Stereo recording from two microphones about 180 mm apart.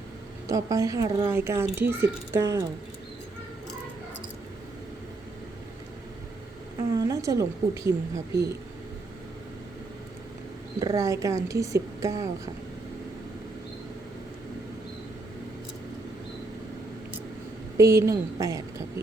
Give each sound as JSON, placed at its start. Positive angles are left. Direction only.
{"t": 0.4, "sound": "speech", "side_deg": -15}
{"t": 6.9, "sound": "speech", "side_deg": -20}
{"t": 10.8, "sound": "speech", "side_deg": -20}
{"t": 17.7, "sound": "speech", "side_deg": -15}